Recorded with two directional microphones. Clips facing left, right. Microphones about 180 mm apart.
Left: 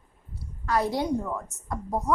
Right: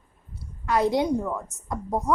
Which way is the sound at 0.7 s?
20° right (ahead or behind).